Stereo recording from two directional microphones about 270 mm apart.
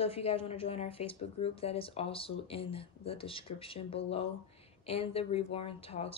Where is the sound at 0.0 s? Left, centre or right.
Left.